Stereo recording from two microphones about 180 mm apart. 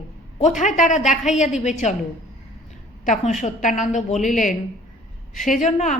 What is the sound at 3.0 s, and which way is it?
A woman's voice, 40° left (ahead or behind).